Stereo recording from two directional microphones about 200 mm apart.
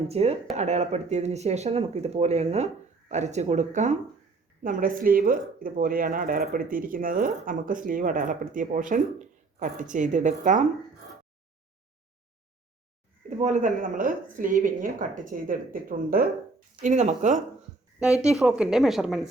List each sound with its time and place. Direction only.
0.1 s speech: 30° right (ahead or behind)
13.4 s speech: 35° right (ahead or behind)
18.2 s speech: 5° right (ahead or behind)